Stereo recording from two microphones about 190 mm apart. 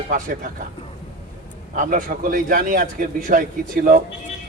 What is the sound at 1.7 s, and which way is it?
Speech, 45° right (ahead or behind).